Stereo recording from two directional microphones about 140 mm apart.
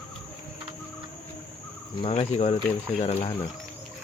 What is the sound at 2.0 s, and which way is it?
Speech, 45° left (ahead or behind).